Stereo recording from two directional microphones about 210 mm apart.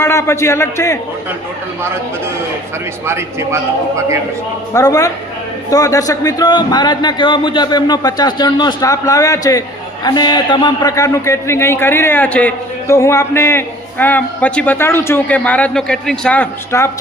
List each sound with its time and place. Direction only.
0.0 s a man's voice: 15° left (ahead or behind)
3.1 s a man's voice: 10° right (ahead or behind)
4.7 s a man's voice: 15° left (ahead or behind)